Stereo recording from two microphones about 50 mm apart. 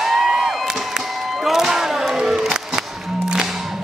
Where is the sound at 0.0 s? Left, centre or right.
Centre.